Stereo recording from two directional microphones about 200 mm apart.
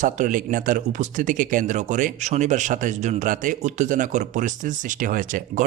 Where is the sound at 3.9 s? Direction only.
40° right (ahead or behind).